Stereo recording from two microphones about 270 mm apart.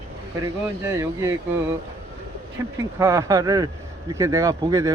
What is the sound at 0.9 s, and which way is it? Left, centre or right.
Speech, centre.